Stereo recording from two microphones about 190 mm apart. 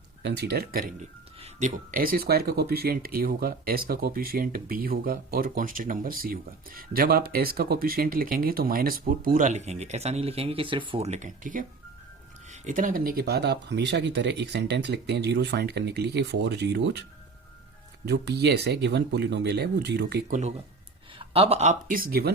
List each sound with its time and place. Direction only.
0.2 s speech: 60° right (ahead or behind)
1.4 s speech: 40° right (ahead or behind); by 17.0 s 65° right (ahead or behind)
18.0 s speech: 65° right (ahead or behind)
20.2 s speech: 40° right (ahead or behind)
21.2 s speech: 30° right (ahead or behind); by 22.3 s 50° right (ahead or behind)